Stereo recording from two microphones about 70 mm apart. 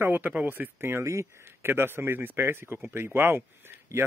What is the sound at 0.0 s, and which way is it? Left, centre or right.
Speech, right.